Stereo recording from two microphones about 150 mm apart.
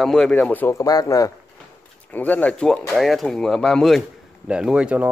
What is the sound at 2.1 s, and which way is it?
Speech, 10° left (ahead or behind).